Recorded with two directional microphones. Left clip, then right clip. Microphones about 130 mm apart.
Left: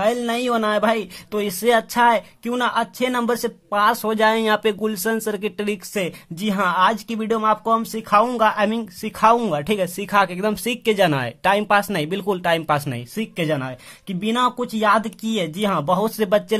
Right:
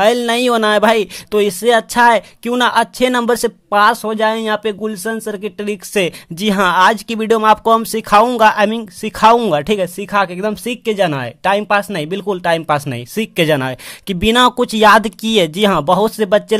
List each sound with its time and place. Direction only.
0.0 s speech: 45° right (ahead or behind)
1.6 s speech: 30° right (ahead or behind)
3.9 s speech: 20° right (ahead or behind)
5.9 s speech: 40° right (ahead or behind)
9.8 s speech: 20° right (ahead or behind)